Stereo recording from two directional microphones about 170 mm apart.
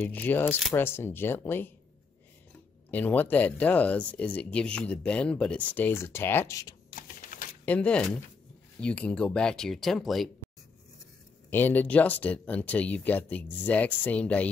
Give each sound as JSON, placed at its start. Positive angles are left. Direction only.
{"t": 0.0, "sound": "speech", "side_deg": 10}
{"t": 2.9, "sound": "speech", "side_deg": 10}
{"t": 7.0, "sound": "a sound", "side_deg": 55}
{"t": 7.6, "sound": "speech", "side_deg": 10}
{"t": 11.5, "sound": "speech", "side_deg": 10}